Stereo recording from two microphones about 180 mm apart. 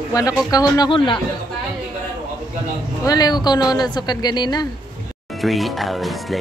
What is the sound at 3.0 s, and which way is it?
Speech, 20° left (ahead or behind).